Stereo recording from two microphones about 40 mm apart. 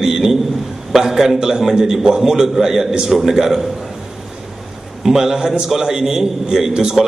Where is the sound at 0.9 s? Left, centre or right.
Centre.